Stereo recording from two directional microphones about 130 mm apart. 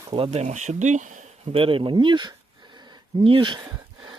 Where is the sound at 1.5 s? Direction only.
45° right (ahead or behind).